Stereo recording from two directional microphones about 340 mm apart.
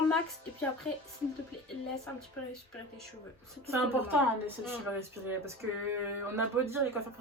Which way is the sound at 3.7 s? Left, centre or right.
Centre.